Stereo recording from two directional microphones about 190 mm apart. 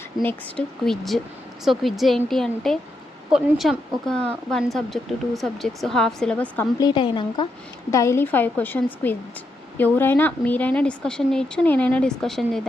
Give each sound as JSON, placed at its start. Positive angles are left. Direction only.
{"t": 0.2, "sound": "a woman's voice", "side_deg": 5}
{"t": 6.7, "sound": "a woman's voice", "side_deg": 25}